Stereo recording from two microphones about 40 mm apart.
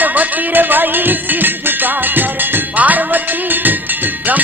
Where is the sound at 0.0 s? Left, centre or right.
Right.